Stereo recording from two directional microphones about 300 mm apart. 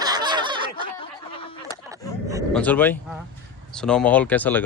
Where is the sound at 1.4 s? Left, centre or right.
Centre.